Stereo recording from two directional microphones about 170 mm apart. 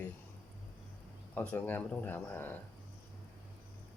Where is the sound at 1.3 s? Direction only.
10° left (ahead or behind).